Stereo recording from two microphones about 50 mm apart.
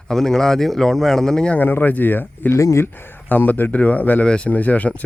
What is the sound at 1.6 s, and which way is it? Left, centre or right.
Speech, left.